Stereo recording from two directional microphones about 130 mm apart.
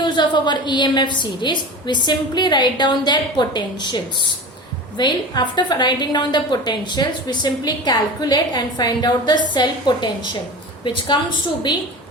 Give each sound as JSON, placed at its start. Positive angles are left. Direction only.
{"t": 0.0, "sound": "a woman's voice", "side_deg": 35}